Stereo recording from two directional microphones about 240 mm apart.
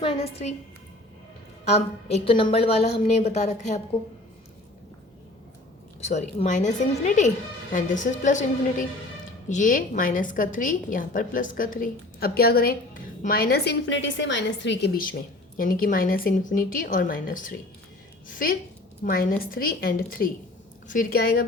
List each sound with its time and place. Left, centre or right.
0.0 s a woman's voice: left
1.6 s a woman's voice: left
6.0 s a woman's voice: left